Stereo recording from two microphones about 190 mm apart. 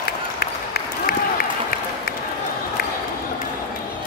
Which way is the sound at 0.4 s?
55° left (ahead or behind).